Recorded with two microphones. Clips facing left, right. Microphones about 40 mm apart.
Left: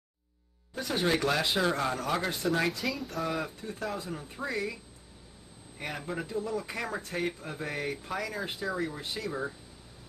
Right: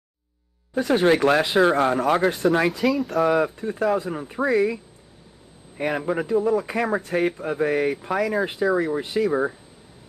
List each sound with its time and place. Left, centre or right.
0.8 s speech: right
2.7 s speech: centre
3.2 s speech: right
5.8 s speech: right
9.3 s speech: right